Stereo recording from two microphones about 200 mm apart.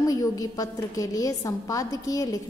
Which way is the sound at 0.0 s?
15° left (ahead or behind).